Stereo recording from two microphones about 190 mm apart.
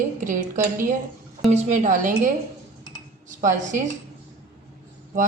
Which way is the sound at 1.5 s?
40° right (ahead or behind).